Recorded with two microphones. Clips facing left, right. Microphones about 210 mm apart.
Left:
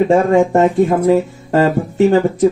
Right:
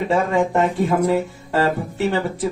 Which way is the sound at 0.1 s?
45° left (ahead or behind).